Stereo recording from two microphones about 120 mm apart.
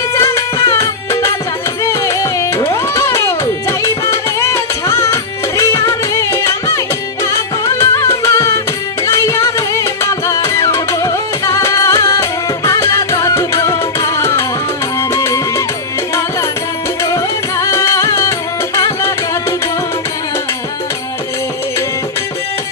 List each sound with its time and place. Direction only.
0.1 s music: 25° left (ahead or behind)
17.0 s music: 25° left (ahead or behind)